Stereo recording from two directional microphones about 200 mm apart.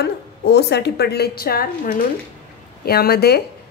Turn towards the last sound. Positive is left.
turn(degrees=50)  # may be behind; listen again after turning